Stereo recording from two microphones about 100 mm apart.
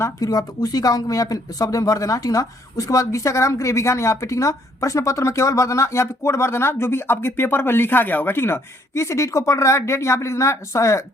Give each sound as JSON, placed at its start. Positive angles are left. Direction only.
{"t": 0.0, "sound": "speech", "side_deg": 40}